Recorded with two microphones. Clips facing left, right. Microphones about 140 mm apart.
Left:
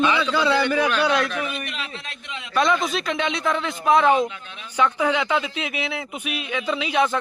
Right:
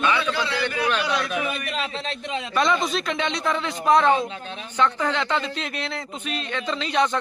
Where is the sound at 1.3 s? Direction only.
5° right (ahead or behind).